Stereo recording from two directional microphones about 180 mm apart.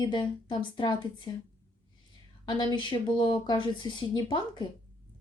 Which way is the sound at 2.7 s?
25° left (ahead or behind).